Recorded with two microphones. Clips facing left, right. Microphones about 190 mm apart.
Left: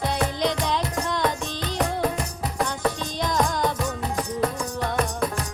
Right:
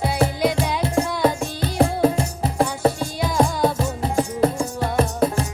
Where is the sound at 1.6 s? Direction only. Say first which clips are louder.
Right 7 dB; 30° right (ahead or behind).